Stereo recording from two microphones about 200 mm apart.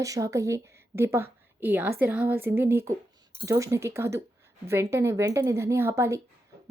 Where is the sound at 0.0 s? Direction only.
15° right (ahead or behind).